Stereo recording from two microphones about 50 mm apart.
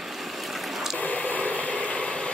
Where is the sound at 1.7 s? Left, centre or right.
Centre.